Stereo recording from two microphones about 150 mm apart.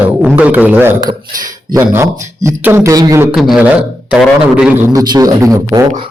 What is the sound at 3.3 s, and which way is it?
Speech, centre (ahead or behind).